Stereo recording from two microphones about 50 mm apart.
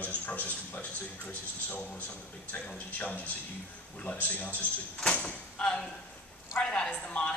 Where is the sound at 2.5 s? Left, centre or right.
Left.